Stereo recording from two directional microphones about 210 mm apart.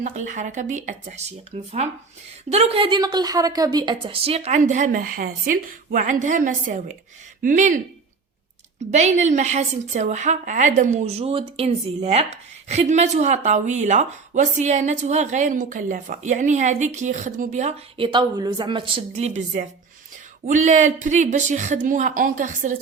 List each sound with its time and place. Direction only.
0.0 s a woman's voice: 35° right (ahead or behind)
8.9 s a woman's voice: 35° right (ahead or behind)